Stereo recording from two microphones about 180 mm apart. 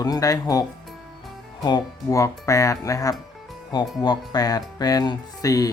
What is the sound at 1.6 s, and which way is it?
Speech, 20° left (ahead or behind).